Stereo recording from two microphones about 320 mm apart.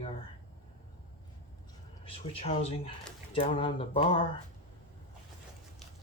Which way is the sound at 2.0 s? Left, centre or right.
Centre.